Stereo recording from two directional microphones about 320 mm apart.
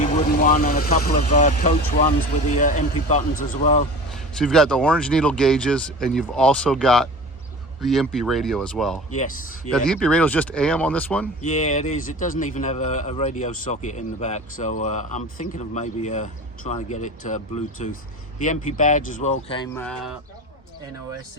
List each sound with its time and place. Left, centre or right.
0.0 s speech: left
4.1 s speech: centre
9.1 s speech: left
9.7 s speech: centre
11.4 s speech: left